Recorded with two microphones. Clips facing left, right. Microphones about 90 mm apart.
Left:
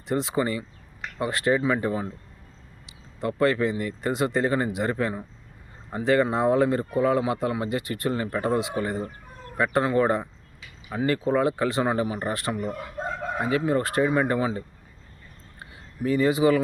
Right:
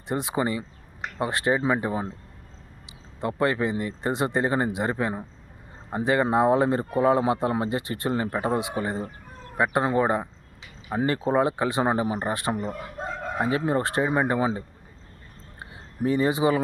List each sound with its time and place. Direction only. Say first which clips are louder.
0.1 s speech: left 1 dB; 20° right (ahead or behind)
10.8 s speech: even; 30° right (ahead or behind)
15.5 s a sound: right 3 dB; 25° right (ahead or behind)